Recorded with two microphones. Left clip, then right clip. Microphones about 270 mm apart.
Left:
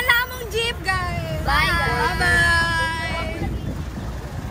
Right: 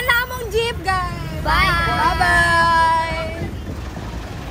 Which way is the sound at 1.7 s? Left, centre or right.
Centre.